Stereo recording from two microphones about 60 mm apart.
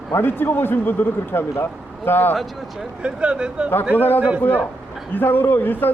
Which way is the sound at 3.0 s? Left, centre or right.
Centre.